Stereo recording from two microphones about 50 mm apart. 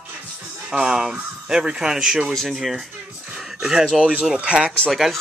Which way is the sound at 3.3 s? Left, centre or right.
Centre.